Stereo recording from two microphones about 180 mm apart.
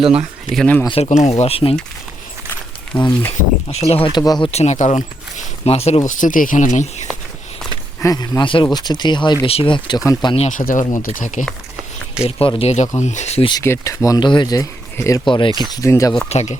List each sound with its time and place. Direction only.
0.5 s speech: 5° left (ahead or behind)
0.9 s speech: 30° left (ahead or behind)
2.9 s speech: 10° left (ahead or behind)
3.7 s speech: 35° left (ahead or behind)
6.1 s speech: 45° left (ahead or behind)
8.0 s speech: 20° left (ahead or behind)
10.6 s speech: 50° left (ahead or behind)
12.4 s speech: 30° left (ahead or behind)
13.5 s speech: 15° left (ahead or behind)
16.3 s speech: 40° left (ahead or behind)